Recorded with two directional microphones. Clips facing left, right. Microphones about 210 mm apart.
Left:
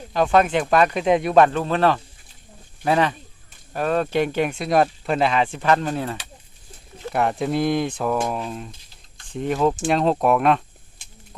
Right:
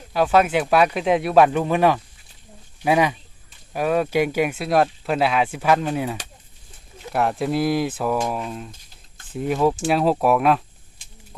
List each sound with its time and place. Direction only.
0.1 s speech: 5° right (ahead or behind)